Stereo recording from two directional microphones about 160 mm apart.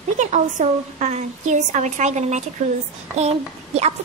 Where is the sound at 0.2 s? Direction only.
50° right (ahead or behind).